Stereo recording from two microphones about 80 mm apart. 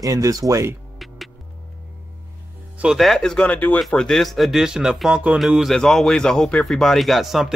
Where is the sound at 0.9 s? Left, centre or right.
Centre.